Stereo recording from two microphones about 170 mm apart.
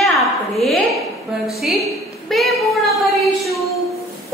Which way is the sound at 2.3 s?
Centre (ahead or behind).